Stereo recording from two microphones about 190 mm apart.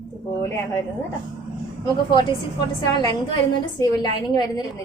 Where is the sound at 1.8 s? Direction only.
20° left (ahead or behind).